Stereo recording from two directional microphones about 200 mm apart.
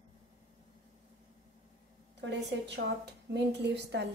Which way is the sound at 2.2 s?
60° right (ahead or behind).